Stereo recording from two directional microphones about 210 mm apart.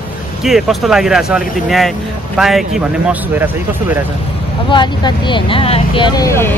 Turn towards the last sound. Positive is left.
turn(degrees=10)  # may be behind; listen again after turning